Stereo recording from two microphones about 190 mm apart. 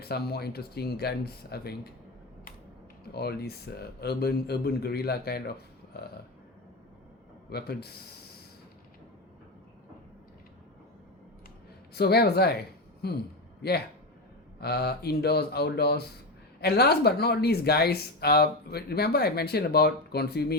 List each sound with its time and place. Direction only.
0.0 s speech: 55° left (ahead or behind)
3.1 s speech: 55° left (ahead or behind)
7.5 s speech: 55° left (ahead or behind)
11.9 s a man's voice: 55° left (ahead or behind)